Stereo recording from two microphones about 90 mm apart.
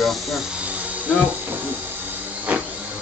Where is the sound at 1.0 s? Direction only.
15° right (ahead or behind).